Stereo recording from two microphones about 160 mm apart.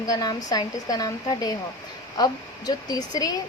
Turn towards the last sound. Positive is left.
turn(degrees=25)  # may be behind; listen again after turning